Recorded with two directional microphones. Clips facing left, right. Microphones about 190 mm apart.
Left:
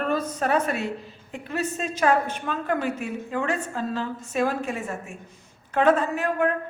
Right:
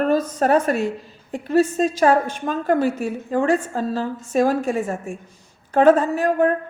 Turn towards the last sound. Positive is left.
turn(degrees=-35)  # may be behind; listen again after turning